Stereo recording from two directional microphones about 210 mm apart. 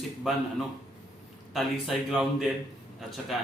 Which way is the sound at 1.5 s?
Centre (ahead or behind).